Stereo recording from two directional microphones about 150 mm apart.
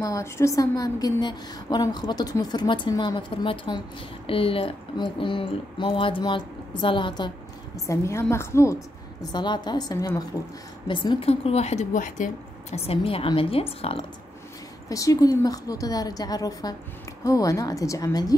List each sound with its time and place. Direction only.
0.0 s a woman's voice: 20° left (ahead or behind)
7.8 s a woman's voice: 20° left (ahead or behind)
9.3 s a woman's voice: 30° left (ahead or behind)
10.9 s a woman's voice: 30° left (ahead or behind); by 12.3 s 55° left (ahead or behind)
12.7 s speech: 40° left (ahead or behind)
14.9 s a woman's voice: 25° left (ahead or behind)